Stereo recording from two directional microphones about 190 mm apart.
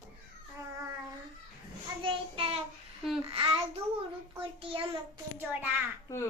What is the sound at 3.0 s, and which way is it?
Speech, centre (ahead or behind).